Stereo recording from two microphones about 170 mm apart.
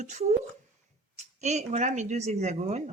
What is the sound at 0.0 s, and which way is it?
Speech, 40° right (ahead or behind).